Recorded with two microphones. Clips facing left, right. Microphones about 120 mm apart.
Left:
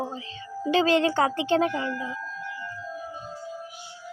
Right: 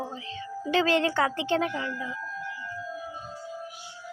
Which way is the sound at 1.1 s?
40° left (ahead or behind).